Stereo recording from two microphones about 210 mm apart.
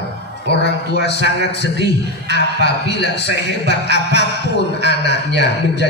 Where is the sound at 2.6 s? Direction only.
55° left (ahead or behind).